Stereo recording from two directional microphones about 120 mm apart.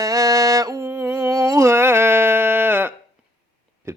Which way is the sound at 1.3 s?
30° right (ahead or behind).